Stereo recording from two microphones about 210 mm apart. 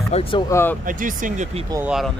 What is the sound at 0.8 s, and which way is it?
Speech, 40° right (ahead or behind).